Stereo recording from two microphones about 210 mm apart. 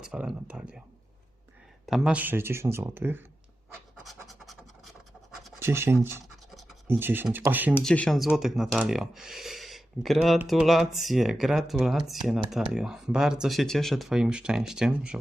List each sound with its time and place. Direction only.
0.0 s speech: 5° right (ahead or behind)
1.9 s speech: 5° right (ahead or behind)
4.0 s scratch: centre (ahead or behind)
5.5 s speech: 10° right (ahead or behind)
6.2 s scratch: centre (ahead or behind)
6.8 s speech: 10° right (ahead or behind)
7.7 s speech: 5° left (ahead or behind)